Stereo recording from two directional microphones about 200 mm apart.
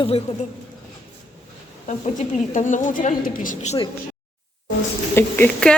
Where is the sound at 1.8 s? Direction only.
35° left (ahead or behind).